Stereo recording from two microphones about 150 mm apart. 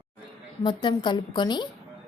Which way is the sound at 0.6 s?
30° left (ahead or behind).